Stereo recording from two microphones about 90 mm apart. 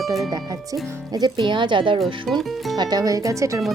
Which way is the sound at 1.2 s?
60° right (ahead or behind).